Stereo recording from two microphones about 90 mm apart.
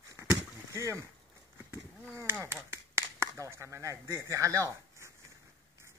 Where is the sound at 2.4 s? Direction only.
30° right (ahead or behind).